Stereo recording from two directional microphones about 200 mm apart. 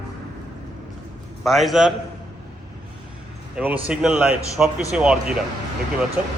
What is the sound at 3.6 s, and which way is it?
A man's voice, 5° right (ahead or behind).